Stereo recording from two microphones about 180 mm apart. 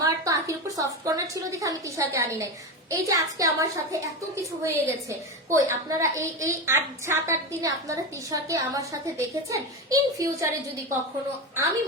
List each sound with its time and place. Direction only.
0.0 s a woman's voice: 20° right (ahead or behind)